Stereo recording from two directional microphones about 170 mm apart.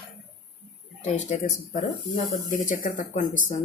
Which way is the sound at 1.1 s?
40° left (ahead or behind).